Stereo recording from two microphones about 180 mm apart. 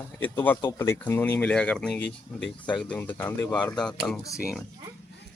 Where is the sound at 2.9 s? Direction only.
10° left (ahead or behind).